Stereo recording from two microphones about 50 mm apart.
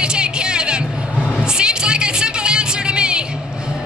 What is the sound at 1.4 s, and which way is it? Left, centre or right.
Music, centre.